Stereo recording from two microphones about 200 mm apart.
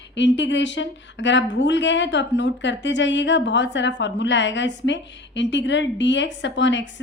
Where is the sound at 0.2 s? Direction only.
65° left (ahead or behind).